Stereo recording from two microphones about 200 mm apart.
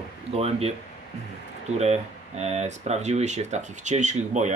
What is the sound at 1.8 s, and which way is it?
Speech, 35° right (ahead or behind).